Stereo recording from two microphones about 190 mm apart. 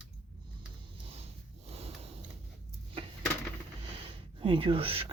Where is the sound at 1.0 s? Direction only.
30° right (ahead or behind).